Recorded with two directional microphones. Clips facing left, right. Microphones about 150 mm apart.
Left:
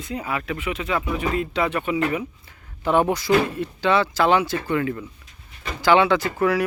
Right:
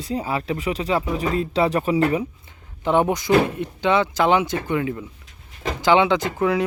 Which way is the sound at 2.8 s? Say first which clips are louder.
Right 1 dB; 20° right (ahead or behind).